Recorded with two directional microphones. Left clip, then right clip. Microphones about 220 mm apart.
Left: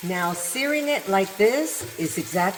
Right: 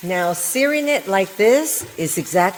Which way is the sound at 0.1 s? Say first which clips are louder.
Right 6 dB; 55° right (ahead or behind).